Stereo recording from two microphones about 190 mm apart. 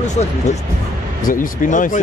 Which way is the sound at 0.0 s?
35° left (ahead or behind).